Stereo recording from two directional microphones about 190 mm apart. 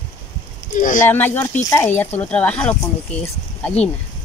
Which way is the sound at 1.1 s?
10° left (ahead or behind).